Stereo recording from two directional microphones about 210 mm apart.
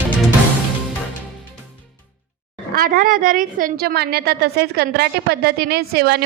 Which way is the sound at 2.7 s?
45° right (ahead or behind).